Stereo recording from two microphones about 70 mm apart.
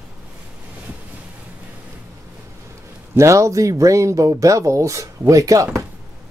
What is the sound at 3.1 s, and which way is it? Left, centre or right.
Speech, right.